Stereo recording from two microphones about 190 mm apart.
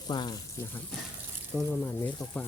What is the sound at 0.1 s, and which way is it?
Speech, 25° left (ahead or behind).